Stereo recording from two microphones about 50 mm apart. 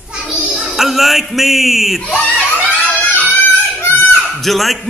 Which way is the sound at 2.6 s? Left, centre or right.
Left.